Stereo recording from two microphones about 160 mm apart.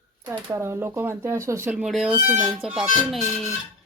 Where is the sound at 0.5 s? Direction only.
15° right (ahead or behind).